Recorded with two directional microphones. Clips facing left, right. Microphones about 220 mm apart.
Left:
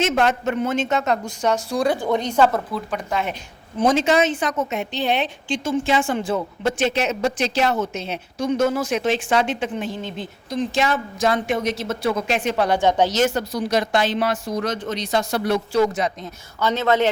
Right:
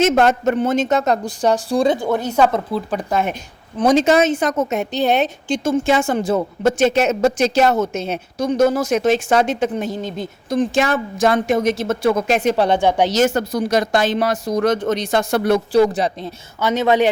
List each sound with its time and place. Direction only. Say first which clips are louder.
0.0 s speech: right 5 dB; 45° right (ahead or behind); by 2.0 s 30° right (ahead or behind)
2.0 s a woman's voice: right 2 dB; 5° right (ahead or behind)
2.7 s a woman's voice: right 5 dB; 35° right (ahead or behind)
12.8 s a woman's voice: right 2 dB; 10° right (ahead or behind)
13.1 s a woman's voice: right 4 dB; 45° right (ahead or behind)
15.7 s speech: right 4 dB; 35° right (ahead or behind)
16.6 s a woman's voice: right 3 dB; 15° right (ahead or behind)